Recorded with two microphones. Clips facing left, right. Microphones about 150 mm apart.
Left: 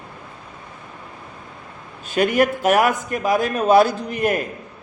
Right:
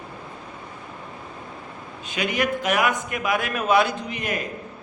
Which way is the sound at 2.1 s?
50° left (ahead or behind).